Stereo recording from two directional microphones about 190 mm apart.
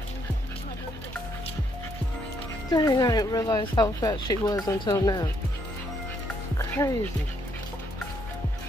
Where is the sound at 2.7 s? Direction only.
20° left (ahead or behind).